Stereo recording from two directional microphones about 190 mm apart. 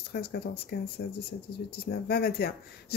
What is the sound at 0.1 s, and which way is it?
Speech, 55° left (ahead or behind).